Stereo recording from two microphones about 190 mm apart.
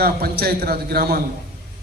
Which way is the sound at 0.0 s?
55° right (ahead or behind).